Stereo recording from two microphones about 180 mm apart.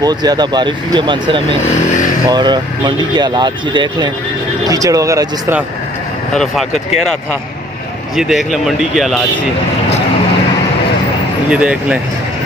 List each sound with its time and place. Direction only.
0.0 s speech: 20° right (ahead or behind)
1.8 s speech: 45° left (ahead or behind)
2.2 s speech: 25° right (ahead or behind)
6.3 s speech: centre (ahead or behind)
8.2 s speech: centre (ahead or behind)
11.5 s speech: 5° right (ahead or behind)